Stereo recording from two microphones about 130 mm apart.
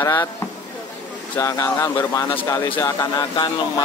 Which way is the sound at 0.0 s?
25° left (ahead or behind).